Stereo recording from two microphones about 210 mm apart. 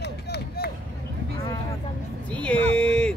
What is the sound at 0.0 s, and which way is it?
Chop, 50° left (ahead or behind).